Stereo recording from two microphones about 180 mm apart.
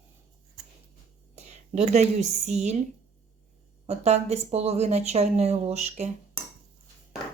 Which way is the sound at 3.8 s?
35° right (ahead or behind).